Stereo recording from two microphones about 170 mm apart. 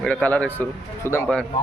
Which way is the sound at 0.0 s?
10° left (ahead or behind).